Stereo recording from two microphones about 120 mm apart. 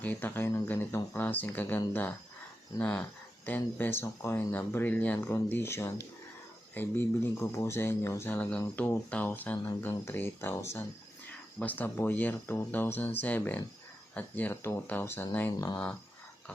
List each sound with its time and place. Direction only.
0.0 s speech: 15° left (ahead or behind)
15.5 s speech: 30° left (ahead or behind)